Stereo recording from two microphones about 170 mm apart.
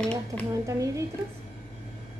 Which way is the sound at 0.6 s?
20° right (ahead or behind).